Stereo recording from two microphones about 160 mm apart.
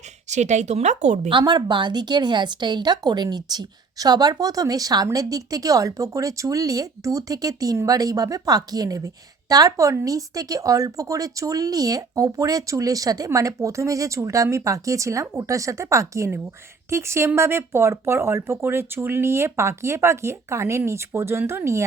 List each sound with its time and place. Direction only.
0.3 s speech: 45° right (ahead or behind)
1.3 s speech: 30° right (ahead or behind)